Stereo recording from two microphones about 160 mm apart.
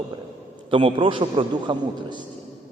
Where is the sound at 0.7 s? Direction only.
35° right (ahead or behind).